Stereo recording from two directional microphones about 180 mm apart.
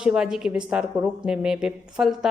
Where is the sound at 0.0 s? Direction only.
5° right (ahead or behind).